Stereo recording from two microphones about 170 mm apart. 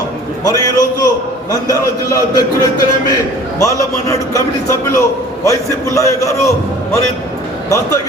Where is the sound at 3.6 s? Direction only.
20° left (ahead or behind).